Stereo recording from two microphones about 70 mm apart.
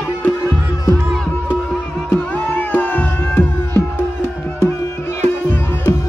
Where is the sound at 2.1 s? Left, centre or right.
Left.